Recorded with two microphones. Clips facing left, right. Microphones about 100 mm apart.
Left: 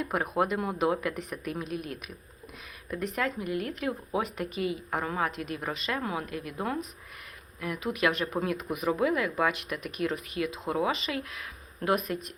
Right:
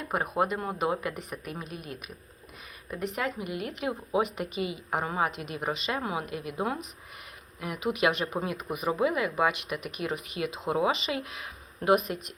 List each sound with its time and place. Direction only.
0.0 s speech: centre (ahead or behind)
3.2 s a woman's voice: 10° right (ahead or behind)
8.3 s a woman's voice: 10° right (ahead or behind)
10.3 s speech: 25° right (ahead or behind)